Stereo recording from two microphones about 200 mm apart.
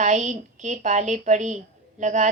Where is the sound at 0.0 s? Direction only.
40° right (ahead or behind).